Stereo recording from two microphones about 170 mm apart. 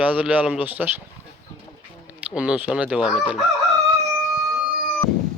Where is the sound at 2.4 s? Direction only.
5° right (ahead or behind).